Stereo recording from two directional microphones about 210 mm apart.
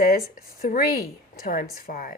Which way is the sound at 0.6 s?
45° left (ahead or behind).